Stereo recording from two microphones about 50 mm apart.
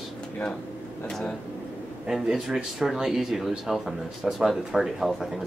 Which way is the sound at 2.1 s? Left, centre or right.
Centre.